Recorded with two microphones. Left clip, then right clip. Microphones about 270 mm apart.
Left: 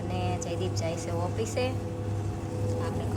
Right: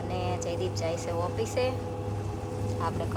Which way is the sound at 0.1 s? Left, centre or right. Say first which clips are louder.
Right 1 dB; centre.